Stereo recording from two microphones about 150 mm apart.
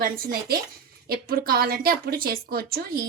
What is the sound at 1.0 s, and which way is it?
A woman's voice, 90° right.